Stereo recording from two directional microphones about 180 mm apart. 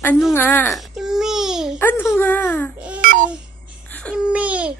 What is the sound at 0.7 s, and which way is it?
Baby cry, centre (ahead or behind).